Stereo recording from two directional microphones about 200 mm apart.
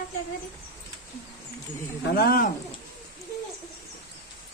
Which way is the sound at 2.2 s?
50° left (ahead or behind).